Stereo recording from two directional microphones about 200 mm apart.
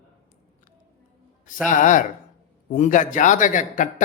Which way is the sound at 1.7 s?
40° left (ahead or behind).